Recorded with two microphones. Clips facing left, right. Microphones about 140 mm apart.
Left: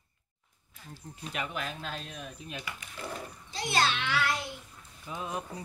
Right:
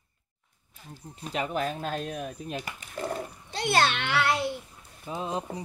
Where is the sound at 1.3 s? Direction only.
40° right (ahead or behind).